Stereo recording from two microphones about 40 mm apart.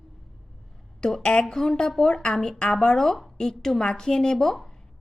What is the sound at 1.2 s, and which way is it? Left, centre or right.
Speech, centre.